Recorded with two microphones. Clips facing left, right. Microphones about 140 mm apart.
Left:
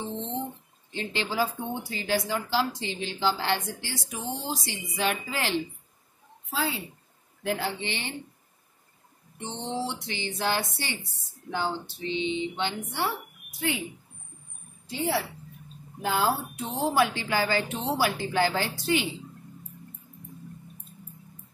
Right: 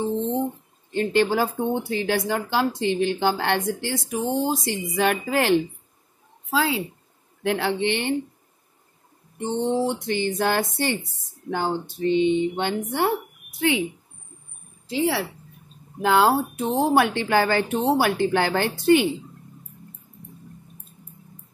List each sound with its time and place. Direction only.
0.9 s speech: 55° right (ahead or behind)
6.5 s speech: 90° right
7.4 s speech: 70° right (ahead or behind)
9.4 s speech: 50° right (ahead or behind)
13.6 s speech: 75° right (ahead or behind)
14.9 s speech: 90° right
16.0 s speech: 75° right (ahead or behind)
16.6 s speech: 55° right (ahead or behind)